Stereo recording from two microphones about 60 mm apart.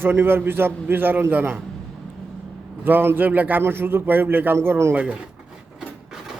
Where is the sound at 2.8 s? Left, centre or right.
Right.